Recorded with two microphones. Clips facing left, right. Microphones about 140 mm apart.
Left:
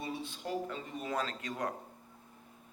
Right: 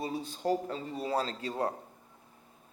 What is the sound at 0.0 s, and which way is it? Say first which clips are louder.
A man's voice: right 6 dB; 40° right (ahead or behind).